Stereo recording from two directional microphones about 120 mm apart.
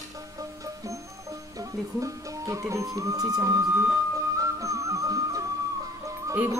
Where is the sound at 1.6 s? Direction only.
25° right (ahead or behind).